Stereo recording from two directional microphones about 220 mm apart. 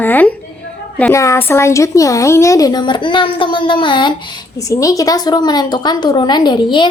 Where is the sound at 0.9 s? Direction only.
10° left (ahead or behind).